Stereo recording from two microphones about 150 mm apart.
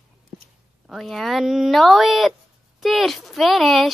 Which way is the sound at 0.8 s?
Centre (ahead or behind).